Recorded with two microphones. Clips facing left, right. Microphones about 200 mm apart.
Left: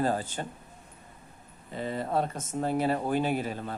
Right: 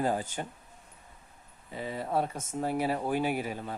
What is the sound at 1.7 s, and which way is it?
Speech, 5° right (ahead or behind).